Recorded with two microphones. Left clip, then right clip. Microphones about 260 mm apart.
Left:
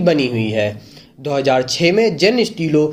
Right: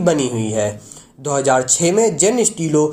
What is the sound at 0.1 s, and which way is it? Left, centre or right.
Speech, right.